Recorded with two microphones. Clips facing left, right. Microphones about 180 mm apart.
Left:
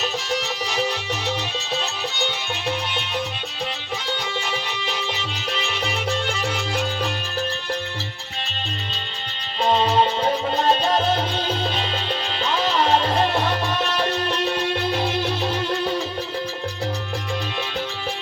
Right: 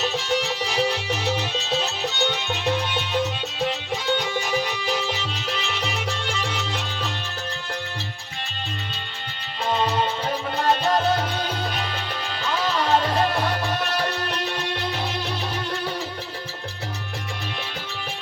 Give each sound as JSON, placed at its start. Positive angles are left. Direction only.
{"t": 0.0, "sound": "music", "side_deg": 0}
{"t": 0.7, "sound": "music", "side_deg": -10}
{"t": 2.1, "sound": "music", "side_deg": 15}
{"t": 9.6, "sound": "music", "side_deg": 30}
{"t": 14.5, "sound": "music", "side_deg": 25}